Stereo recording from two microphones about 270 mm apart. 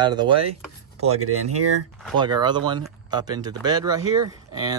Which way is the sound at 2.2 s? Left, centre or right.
Centre.